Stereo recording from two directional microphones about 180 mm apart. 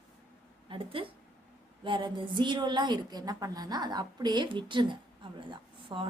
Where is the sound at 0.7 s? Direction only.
30° right (ahead or behind).